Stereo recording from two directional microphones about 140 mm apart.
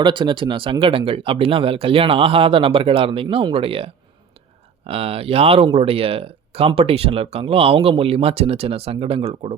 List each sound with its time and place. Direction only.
0.0 s speech: 35° right (ahead or behind)